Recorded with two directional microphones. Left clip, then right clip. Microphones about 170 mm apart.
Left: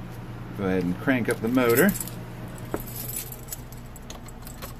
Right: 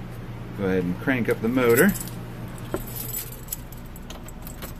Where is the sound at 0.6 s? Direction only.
25° left (ahead or behind).